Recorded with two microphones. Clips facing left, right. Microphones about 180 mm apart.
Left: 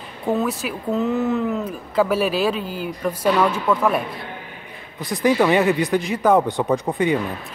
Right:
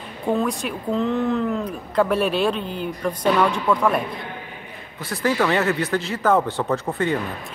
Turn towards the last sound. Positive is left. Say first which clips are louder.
# left 3 dB
turn(degrees=15)  # may be behind; listen again after turning